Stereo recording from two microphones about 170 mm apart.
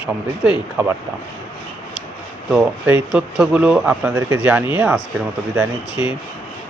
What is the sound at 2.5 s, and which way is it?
Speech, 5° right (ahead or behind).